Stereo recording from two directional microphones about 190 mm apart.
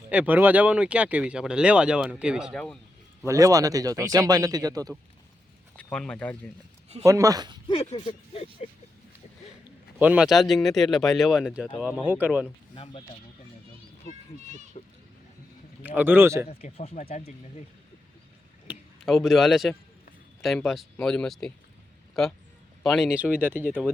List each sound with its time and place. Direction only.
0.1 s speech: 10° right (ahead or behind)
3.2 s speech: 15° right (ahead or behind)
5.7 s speech: 5° left (ahead or behind)
7.0 s speech: 15° right (ahead or behind)
7.7 s speech: 30° left (ahead or behind)
10.0 s speech: 5° right (ahead or behind)
12.7 s speech: 30° left (ahead or behind)
14.8 s a sound: 35° left (ahead or behind)
15.8 s speech: 10° right (ahead or behind)
16.5 s speech: 30° left (ahead or behind)
18.7 s a man's voice: centre (ahead or behind)